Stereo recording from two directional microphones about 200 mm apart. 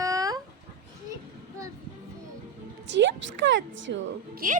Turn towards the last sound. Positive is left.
turn(degrees=-45)  # may be behind; listen again after turning